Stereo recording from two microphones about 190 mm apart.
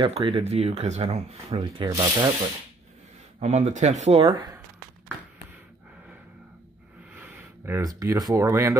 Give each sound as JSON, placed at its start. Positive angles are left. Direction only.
{"t": 0.0, "sound": "speech", "side_deg": -30}
{"t": 1.6, "sound": "rub", "side_deg": -20}
{"t": 3.3, "sound": "speech", "side_deg": -35}
{"t": 7.2, "sound": "speech", "side_deg": -10}